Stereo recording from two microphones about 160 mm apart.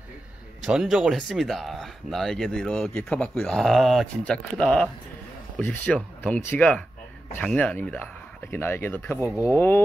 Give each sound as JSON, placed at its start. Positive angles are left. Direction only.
{"t": 0.7, "sound": "speech", "side_deg": -5}